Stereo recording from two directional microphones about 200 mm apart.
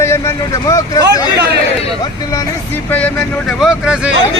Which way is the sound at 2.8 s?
5° left (ahead or behind).